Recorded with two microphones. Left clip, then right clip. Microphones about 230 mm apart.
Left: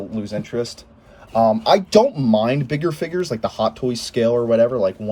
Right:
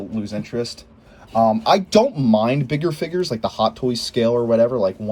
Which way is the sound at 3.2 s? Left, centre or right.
Centre.